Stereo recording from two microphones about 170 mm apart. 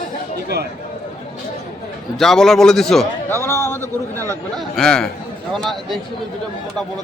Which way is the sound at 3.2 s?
15° left (ahead or behind).